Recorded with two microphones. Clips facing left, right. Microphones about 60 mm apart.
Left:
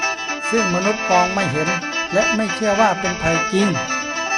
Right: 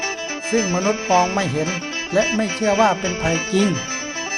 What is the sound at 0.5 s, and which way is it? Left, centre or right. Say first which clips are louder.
Speech: left 1 dB; centre.